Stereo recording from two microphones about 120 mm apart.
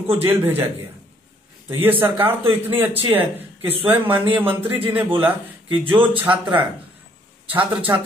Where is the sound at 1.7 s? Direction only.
15° right (ahead or behind).